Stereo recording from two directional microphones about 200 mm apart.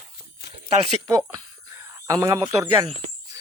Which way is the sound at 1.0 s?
15° right (ahead or behind).